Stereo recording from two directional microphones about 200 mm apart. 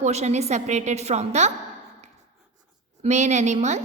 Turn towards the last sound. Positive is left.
turn(degrees=-35)  # may be behind; listen again after turning